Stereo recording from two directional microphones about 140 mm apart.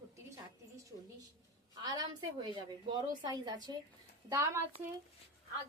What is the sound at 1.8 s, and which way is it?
A woman's voice, 30° right (ahead or behind).